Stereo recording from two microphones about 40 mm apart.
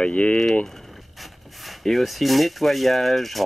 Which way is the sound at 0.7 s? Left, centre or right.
Centre.